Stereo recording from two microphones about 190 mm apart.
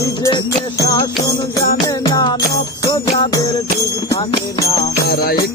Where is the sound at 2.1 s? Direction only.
20° left (ahead or behind).